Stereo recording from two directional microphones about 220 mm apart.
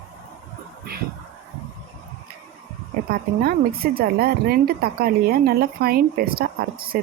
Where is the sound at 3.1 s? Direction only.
45° right (ahead or behind).